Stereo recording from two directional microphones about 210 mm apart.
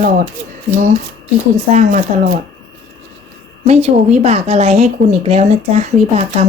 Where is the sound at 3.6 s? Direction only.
30° right (ahead or behind).